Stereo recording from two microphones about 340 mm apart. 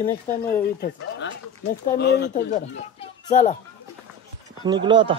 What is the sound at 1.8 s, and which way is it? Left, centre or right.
Speech, left.